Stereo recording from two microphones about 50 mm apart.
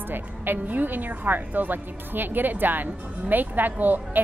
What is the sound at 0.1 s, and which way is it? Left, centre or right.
A woman's voice, right.